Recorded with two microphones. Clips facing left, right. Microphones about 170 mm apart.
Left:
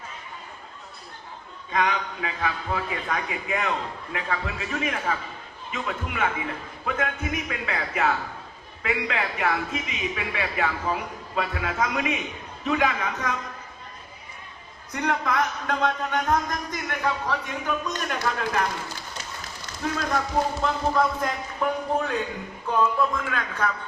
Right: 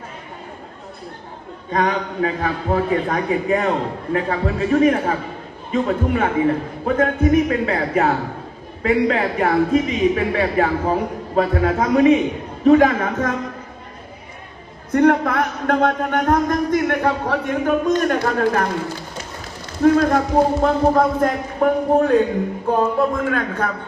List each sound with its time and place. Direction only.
1.7 s a man's voice: 40° right (ahead or behind)
12.6 s speech: 45° right (ahead or behind)
14.9 s speech: 55° right (ahead or behind)
19.8 s speech: 50° right (ahead or behind)